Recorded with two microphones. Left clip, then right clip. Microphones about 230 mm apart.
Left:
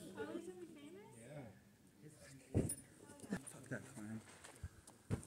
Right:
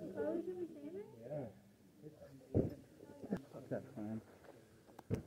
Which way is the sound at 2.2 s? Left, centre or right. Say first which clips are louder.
Right 4 dB; centre.